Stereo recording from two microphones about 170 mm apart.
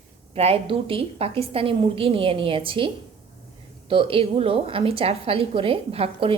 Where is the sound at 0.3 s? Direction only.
35° right (ahead or behind).